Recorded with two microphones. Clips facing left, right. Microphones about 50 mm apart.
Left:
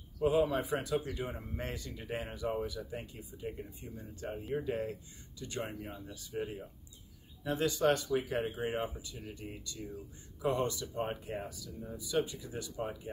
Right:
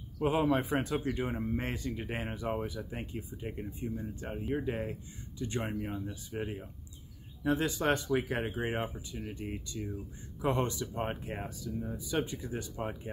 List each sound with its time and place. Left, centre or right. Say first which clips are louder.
0.2 s speech: right 1 dB; right